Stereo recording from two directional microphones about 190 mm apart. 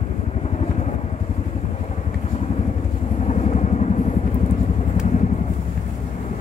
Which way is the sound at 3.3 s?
35° left (ahead or behind).